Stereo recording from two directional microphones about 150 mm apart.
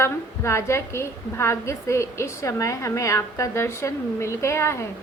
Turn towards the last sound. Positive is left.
turn(degrees=20)  # may be behind; listen again after turning